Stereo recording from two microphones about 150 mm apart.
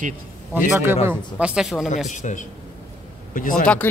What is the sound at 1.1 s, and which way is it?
Speech, 10° right (ahead or behind).